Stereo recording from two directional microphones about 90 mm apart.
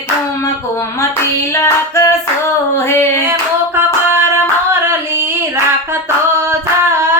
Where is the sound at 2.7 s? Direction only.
30° left (ahead or behind).